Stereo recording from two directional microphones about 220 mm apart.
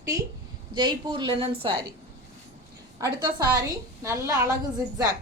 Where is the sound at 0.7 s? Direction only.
20° right (ahead or behind).